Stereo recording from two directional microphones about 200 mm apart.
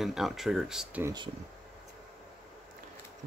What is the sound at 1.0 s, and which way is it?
Speech, 20° right (ahead or behind).